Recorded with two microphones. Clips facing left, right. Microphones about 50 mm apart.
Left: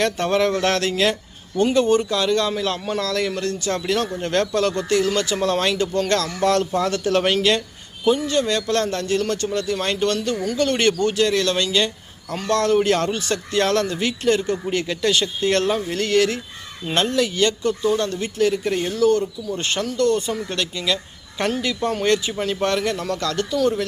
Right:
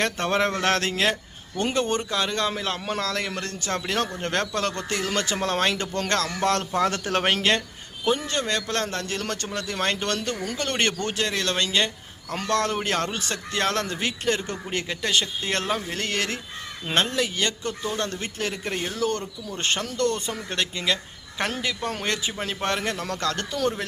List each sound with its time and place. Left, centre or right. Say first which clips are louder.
0.0 s a man's voice: left 4 dB; right
15.0 s a man's voice: left 6 dB; centre; by 18.5 s right
18.5 s a man's voice: left 8 dB; right
19.0 s a man's voice: left 12 dB; right